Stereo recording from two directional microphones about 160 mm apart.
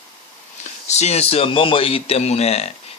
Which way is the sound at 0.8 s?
45° left (ahead or behind).